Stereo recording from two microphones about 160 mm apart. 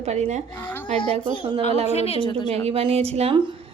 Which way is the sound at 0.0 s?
45° right (ahead or behind).